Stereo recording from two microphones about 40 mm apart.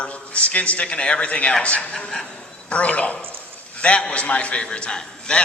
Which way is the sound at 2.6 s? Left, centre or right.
Left.